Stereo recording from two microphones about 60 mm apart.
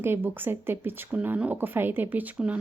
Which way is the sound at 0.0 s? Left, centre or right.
Right.